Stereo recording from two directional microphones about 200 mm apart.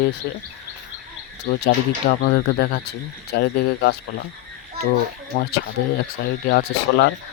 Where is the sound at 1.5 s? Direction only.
55° left (ahead or behind).